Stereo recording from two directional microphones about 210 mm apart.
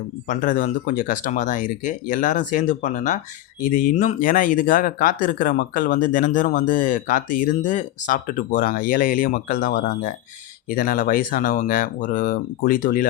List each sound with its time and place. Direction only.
0.3 s speech: 40° left (ahead or behind)